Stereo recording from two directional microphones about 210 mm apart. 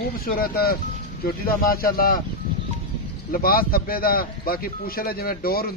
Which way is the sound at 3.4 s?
45° left (ahead or behind).